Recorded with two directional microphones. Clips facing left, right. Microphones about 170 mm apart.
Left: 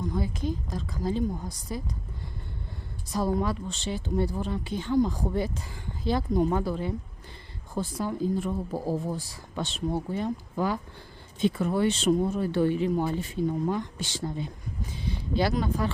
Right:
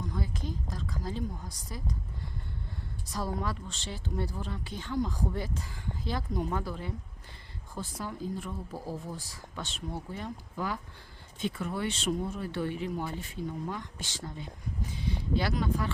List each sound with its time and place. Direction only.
0.1 s speech: 20° left (ahead or behind)
3.1 s speech: 20° left (ahead or behind)